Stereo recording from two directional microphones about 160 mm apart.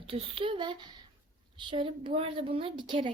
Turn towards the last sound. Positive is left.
turn(degrees=-30)  # may be behind; listen again after turning